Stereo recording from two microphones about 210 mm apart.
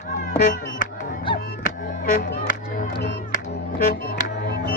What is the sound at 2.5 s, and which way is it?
Music, 45° left (ahead or behind).